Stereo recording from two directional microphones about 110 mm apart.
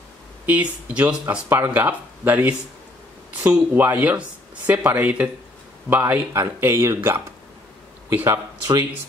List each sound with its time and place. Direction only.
0.5 s speech: 15° right (ahead or behind)